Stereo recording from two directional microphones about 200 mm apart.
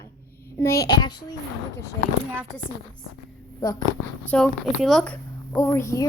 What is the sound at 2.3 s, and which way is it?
Speech, 10° right (ahead or behind).